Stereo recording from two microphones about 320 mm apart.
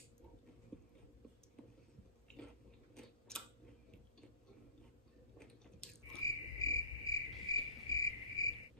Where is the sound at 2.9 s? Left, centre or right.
Centre.